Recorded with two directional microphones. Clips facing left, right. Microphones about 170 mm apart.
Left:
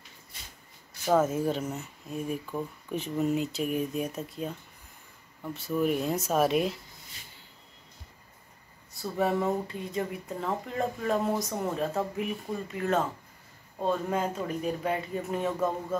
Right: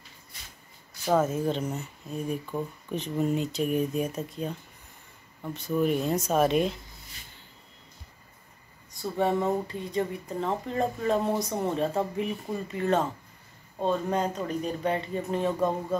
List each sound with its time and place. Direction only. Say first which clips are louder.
1.0 s speech: even; 5° left (ahead or behind)
9.0 s speech: right 1 dB; centre (ahead or behind)